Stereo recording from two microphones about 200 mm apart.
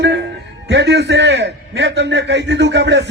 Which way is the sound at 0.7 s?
55° right (ahead or behind).